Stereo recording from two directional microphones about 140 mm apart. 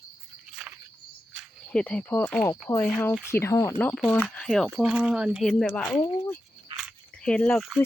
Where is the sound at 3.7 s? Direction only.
10° left (ahead or behind).